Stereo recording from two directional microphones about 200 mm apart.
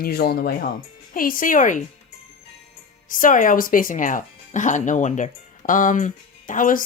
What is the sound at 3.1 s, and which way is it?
Speech, 40° left (ahead or behind).